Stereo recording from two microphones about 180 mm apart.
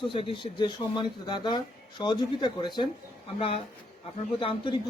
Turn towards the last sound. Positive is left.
turn(degrees=30)  # may be behind; listen again after turning